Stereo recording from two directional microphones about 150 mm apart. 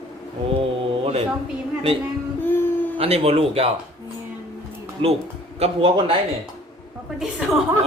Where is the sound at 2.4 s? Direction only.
15° left (ahead or behind).